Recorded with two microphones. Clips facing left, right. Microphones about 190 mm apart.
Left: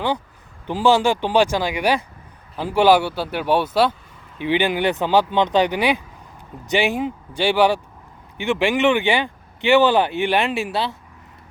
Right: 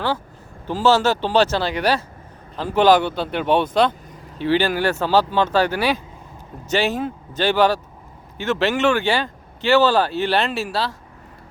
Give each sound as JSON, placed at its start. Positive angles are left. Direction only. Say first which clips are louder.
{"t": 0.7, "sound": "speech", "louder": "even", "side_deg": 15}